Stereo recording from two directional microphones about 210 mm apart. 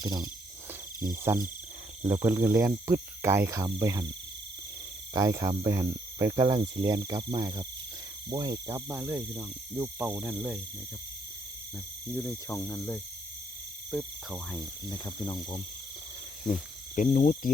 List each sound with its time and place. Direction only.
0.0 s speech: 20° right (ahead or behind)
5.1 s speech: 15° right (ahead or behind)
12.1 s speech: 10° left (ahead or behind)
13.9 s speech: centre (ahead or behind)
14.8 s speech: 20° left (ahead or behind)
16.4 s speech: centre (ahead or behind)
16.9 s speech: 35° left (ahead or behind)